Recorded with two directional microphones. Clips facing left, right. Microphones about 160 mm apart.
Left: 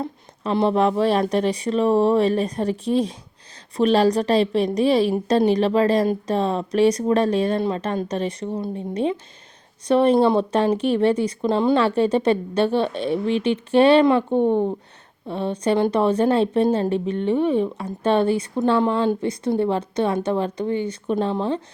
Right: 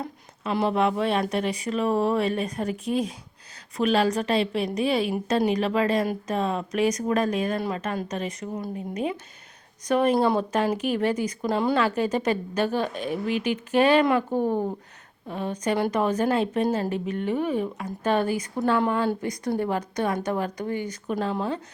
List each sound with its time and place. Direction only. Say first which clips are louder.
0.0 s a woman's voice: left 5 dB; 30° left (ahead or behind)